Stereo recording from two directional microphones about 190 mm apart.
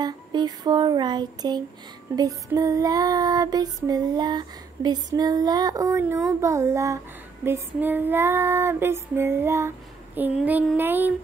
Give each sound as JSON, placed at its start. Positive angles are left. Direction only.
{"t": 0.0, "sound": "a sound", "side_deg": -25}
{"t": 2.1, "sound": "music", "side_deg": -20}
{"t": 6.4, "sound": "female singing", "side_deg": -15}